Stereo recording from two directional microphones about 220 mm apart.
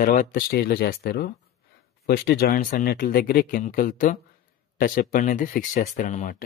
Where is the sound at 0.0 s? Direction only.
35° left (ahead or behind).